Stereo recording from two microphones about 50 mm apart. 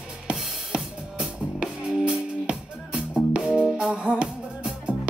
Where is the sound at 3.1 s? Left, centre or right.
Centre.